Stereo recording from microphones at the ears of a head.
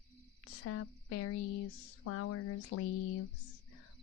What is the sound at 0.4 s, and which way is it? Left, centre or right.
Speech, left.